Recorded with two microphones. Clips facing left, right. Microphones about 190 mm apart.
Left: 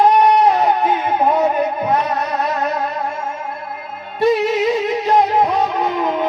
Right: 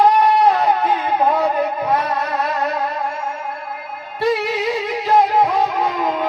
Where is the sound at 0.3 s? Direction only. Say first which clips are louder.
Left 1 dB; 20° left (ahead or behind).